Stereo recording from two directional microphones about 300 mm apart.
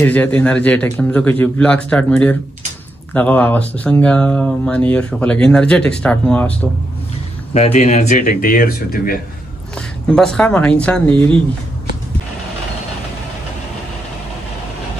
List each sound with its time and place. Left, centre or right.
0.0 s speech: centre
7.5 s speech: left
9.8 s speech: centre